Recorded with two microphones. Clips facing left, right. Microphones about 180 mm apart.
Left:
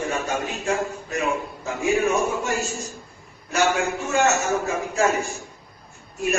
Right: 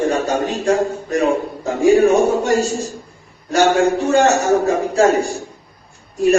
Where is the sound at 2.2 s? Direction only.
40° right (ahead or behind).